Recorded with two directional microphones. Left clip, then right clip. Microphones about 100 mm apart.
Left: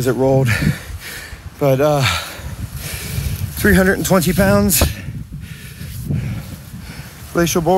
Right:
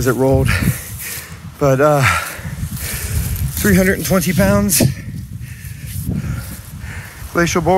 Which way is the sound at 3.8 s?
25° left (ahead or behind).